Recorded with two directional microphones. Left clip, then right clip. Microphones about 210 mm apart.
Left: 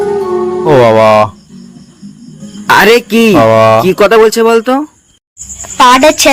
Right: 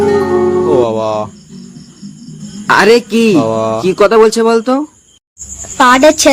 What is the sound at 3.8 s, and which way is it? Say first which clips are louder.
A woman's voice: left 2 dB; 15° left (ahead or behind).